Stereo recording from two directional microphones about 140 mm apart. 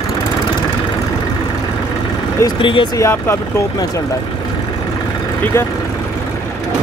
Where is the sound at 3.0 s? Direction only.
20° left (ahead or behind).